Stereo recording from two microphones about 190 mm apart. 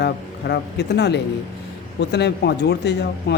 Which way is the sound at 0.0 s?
60° left (ahead or behind).